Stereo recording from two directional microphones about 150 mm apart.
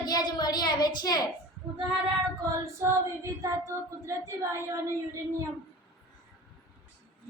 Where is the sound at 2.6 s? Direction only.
20° right (ahead or behind).